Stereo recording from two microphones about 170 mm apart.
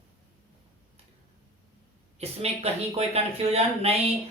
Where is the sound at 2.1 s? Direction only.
35° right (ahead or behind).